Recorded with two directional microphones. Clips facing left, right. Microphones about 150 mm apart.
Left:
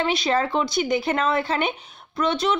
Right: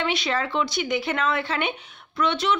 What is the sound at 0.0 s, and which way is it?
Speech, 40° left (ahead or behind).